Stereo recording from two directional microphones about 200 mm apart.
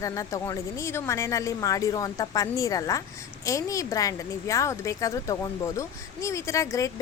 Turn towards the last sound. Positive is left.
turn(degrees=15)  # may be behind; listen again after turning